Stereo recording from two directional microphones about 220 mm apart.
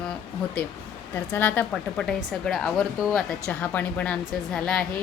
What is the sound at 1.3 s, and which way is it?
Speech, 10° left (ahead or behind).